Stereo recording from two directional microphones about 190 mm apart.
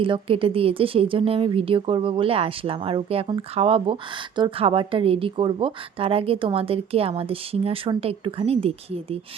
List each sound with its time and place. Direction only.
0.0 s a woman's voice: 30° right (ahead or behind)